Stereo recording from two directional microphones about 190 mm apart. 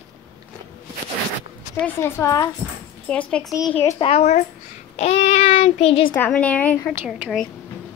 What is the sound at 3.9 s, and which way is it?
Child singing, 35° left (ahead or behind).